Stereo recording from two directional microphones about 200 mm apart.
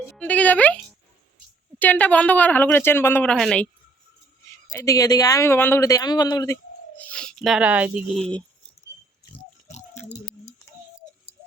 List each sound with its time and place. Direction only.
0.0 s speech: 5° left (ahead or behind)
4.7 s speech: 15° left (ahead or behind); by 8.2 s 5° right (ahead or behind)
9.6 s rattle: 35° left (ahead or behind)